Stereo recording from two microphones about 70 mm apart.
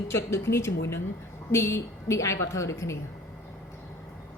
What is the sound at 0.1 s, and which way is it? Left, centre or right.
A woman's voice, left.